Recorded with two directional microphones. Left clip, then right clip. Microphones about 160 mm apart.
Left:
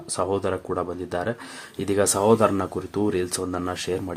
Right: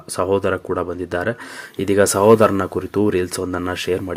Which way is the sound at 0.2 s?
15° right (ahead or behind).